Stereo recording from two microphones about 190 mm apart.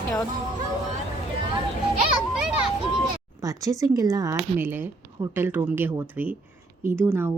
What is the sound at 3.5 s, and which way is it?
Speech, 15° right (ahead or behind).